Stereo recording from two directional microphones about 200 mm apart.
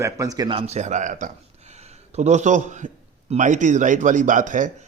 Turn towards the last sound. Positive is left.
turn(degrees=-40)  # may be behind; listen again after turning